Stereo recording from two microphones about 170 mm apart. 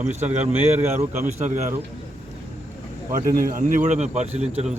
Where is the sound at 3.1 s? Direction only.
55° right (ahead or behind).